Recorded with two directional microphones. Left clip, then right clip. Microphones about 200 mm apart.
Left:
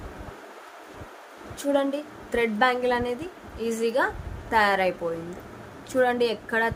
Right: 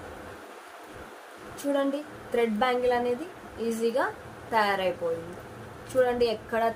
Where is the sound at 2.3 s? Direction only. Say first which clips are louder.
Left 3 dB; 45° left (ahead or behind).